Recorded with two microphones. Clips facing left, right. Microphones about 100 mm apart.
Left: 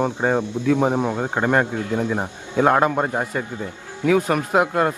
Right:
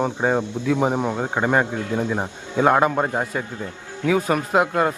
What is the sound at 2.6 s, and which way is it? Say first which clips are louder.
Speech: even; centre (ahead or behind).